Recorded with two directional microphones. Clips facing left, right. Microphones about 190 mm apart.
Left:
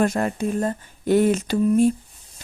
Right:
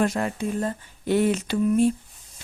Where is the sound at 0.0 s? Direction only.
45° left (ahead or behind).